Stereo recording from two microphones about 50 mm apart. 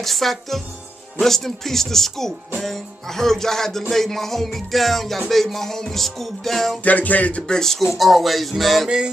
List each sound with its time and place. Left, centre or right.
0.0 s music: centre
6.8 s music: left
7.4 s music: centre
8.8 s music: centre